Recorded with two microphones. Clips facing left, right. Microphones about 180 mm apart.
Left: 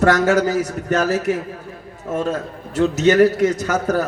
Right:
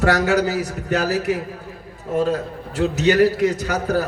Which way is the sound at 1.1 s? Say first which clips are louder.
Left 2 dB; 40° left (ahead or behind).